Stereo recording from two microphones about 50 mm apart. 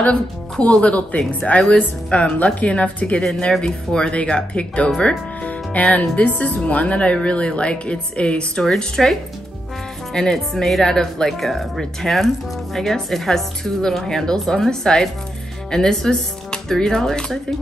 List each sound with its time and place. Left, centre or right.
0.0 s speech: left
3.6 s speech: centre
5.4 s speech: left
10.1 s a woman's voice: centre